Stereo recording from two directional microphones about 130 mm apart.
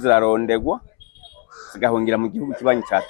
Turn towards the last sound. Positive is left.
turn(degrees=20)  # may be behind; listen again after turning